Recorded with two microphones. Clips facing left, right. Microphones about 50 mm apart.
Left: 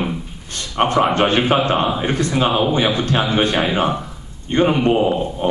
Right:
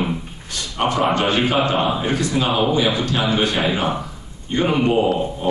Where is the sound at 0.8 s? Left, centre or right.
Left.